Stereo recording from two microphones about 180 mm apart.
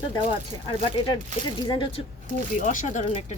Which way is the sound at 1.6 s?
25° left (ahead or behind).